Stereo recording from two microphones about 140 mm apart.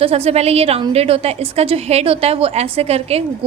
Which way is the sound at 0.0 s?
45° right (ahead or behind).